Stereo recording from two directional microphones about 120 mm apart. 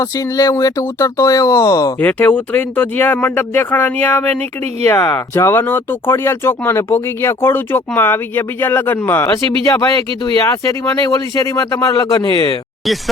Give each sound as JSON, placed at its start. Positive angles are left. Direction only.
{"t": 0.0, "sound": "speech", "side_deg": 30}
{"t": 2.0, "sound": "speech", "side_deg": 15}
{"t": 10.4, "sound": "speech", "side_deg": 25}